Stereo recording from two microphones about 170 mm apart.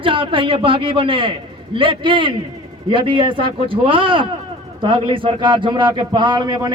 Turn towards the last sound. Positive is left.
turn(degrees=-25)  # may be behind; listen again after turning